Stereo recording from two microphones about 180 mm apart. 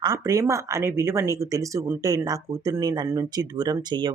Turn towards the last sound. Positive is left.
turn(degrees=-25)  # may be behind; listen again after turning